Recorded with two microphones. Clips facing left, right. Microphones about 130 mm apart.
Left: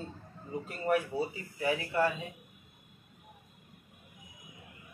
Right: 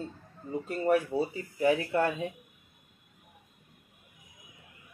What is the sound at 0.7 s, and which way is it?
Speech, 25° right (ahead or behind).